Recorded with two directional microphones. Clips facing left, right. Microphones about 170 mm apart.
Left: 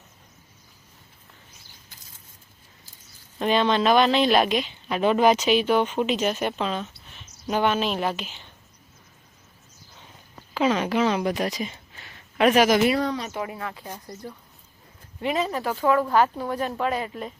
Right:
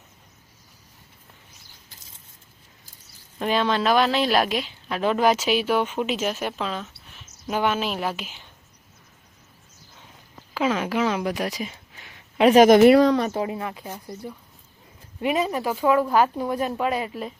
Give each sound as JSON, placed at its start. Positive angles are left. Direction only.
{"t": 3.3, "sound": "a woman's voice", "side_deg": -5}
{"t": 10.5, "sound": "speech", "side_deg": -5}
{"t": 12.6, "sound": "speech", "side_deg": -50}
{"t": 13.3, "sound": "speech", "side_deg": -25}